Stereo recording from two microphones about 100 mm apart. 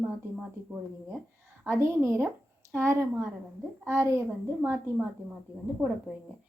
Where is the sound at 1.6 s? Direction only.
25° right (ahead or behind).